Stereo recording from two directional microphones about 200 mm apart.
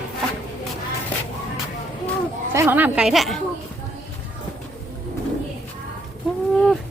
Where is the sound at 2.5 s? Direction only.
10° right (ahead or behind).